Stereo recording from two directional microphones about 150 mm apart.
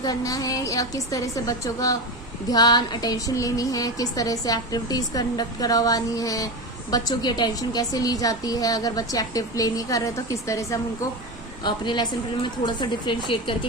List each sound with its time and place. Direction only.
0.0 s a woman's voice: 25° left (ahead or behind)